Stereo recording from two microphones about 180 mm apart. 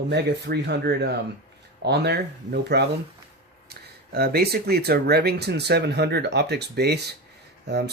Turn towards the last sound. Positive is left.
turn(degrees=-70)  # may be behind; listen again after turning